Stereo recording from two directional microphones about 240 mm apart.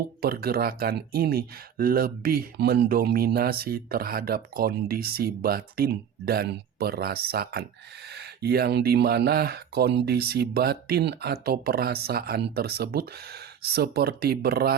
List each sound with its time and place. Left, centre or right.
0.2 s speech: right